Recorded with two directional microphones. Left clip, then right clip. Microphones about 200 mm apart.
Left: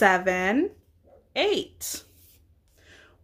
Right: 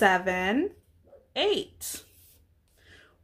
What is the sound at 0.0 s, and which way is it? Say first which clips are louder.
Speech: left 2 dB; 20° left (ahead or behind).